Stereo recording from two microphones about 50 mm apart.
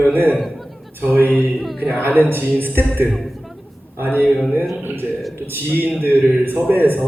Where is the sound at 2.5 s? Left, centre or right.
Right.